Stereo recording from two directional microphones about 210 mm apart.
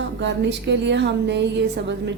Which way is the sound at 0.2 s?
60° right (ahead or behind).